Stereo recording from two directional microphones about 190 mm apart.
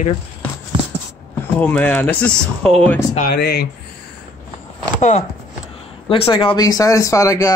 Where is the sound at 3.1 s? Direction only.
50° left (ahead or behind).